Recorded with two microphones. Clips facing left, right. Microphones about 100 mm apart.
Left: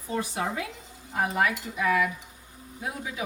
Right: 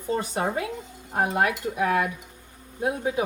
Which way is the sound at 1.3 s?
55° right (ahead or behind).